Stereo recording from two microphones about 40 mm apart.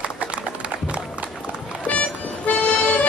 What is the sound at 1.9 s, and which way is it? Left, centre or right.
Accordion, left.